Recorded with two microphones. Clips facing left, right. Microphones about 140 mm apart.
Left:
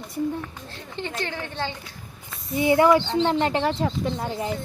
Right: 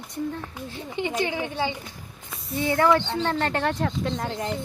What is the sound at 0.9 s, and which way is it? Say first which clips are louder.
Speech: right 4 dB; 15° right (ahead or behind).